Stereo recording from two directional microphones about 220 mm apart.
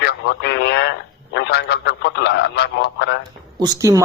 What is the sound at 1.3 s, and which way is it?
Speech, 50° left (ahead or behind).